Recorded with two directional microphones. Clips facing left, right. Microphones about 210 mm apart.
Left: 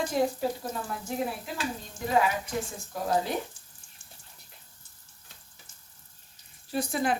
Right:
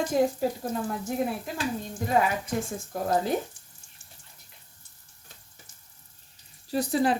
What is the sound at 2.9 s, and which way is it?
Speech, 50° right (ahead or behind).